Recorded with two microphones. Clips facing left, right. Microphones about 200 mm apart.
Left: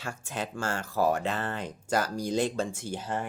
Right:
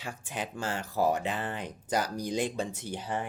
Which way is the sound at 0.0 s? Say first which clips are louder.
Left 2 dB; 15° right (ahead or behind).